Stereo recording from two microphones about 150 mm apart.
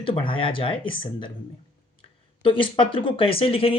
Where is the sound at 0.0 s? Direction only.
35° left (ahead or behind).